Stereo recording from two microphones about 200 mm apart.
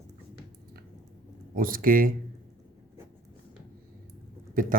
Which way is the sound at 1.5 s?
45° right (ahead or behind).